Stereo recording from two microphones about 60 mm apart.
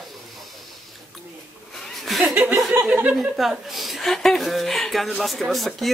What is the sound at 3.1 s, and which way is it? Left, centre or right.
Speech, centre.